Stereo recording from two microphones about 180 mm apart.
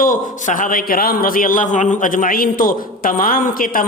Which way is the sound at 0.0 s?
45° left (ahead or behind).